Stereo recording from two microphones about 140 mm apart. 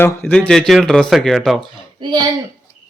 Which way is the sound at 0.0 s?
10° left (ahead or behind).